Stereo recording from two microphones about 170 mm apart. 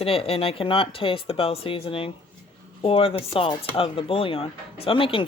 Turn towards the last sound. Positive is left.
turn(degrees=30)  # may be behind; listen again after turning